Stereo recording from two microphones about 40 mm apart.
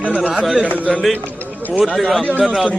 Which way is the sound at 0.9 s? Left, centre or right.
Centre.